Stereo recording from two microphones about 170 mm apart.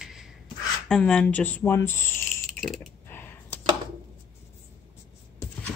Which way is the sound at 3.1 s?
10° left (ahead or behind).